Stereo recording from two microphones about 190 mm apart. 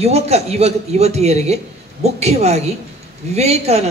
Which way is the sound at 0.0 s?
35° right (ahead or behind).